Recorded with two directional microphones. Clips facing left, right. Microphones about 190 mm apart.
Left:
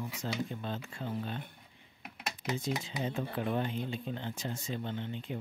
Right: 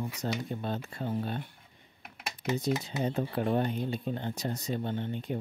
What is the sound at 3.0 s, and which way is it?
Speech, 40° right (ahead or behind).